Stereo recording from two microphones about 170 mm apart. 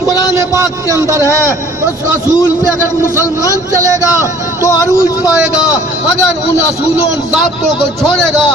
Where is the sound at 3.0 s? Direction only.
20° left (ahead or behind).